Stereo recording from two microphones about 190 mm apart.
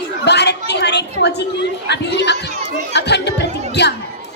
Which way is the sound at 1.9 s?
65° left (ahead or behind).